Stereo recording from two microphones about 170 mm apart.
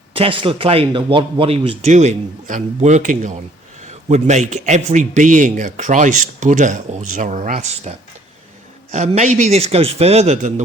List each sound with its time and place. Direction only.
0.1 s a man's voice: 30° right (ahead or behind)